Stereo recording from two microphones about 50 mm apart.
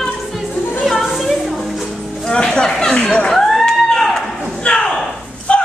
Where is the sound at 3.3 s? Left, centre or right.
Centre.